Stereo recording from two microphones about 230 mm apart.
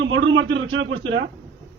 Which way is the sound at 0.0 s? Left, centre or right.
Right.